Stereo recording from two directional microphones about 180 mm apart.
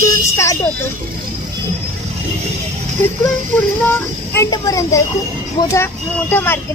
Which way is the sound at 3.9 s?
20° left (ahead or behind).